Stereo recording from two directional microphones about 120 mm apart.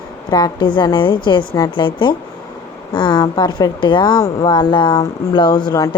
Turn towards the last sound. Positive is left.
turn(degrees=35)  # may be behind; listen again after turning